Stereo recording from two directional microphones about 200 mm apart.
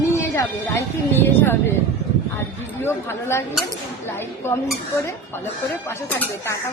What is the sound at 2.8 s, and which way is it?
Speech, 10° left (ahead or behind).